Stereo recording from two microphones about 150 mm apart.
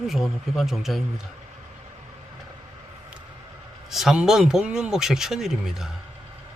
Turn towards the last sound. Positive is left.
turn(degrees=-5)  # may be behind; listen again after turning